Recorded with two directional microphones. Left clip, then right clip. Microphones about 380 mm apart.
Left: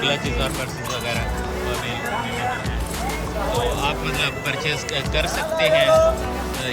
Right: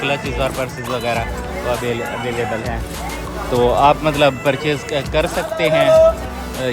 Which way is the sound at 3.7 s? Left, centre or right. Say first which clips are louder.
Right 10 dB; centre.